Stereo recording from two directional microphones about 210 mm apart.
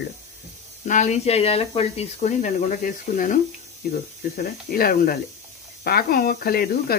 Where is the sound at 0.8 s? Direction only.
35° left (ahead or behind).